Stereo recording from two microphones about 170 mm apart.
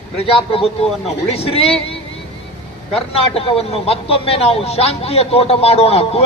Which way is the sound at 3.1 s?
35° left (ahead or behind).